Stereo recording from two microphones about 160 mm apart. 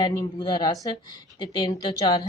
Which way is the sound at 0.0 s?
25° left (ahead or behind).